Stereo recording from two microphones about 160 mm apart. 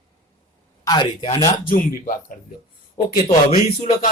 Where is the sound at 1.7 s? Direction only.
65° left (ahead or behind).